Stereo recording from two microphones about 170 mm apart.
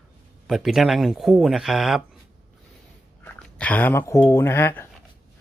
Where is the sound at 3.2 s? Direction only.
10° left (ahead or behind).